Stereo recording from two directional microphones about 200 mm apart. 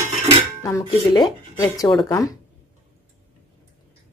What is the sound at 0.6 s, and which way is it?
Speech, 20° left (ahead or behind).